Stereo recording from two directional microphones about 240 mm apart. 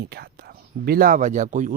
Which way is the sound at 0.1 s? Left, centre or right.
Right.